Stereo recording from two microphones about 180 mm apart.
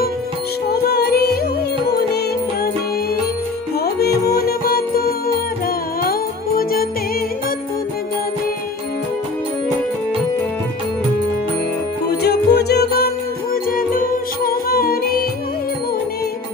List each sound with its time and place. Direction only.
0.7 s music: 65° left (ahead or behind)
3.8 s music: 60° left (ahead or behind)
12.2 s music: 65° left (ahead or behind)